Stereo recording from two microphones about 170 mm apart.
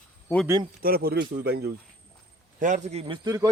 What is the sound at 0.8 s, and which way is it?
Speech, 65° right (ahead or behind).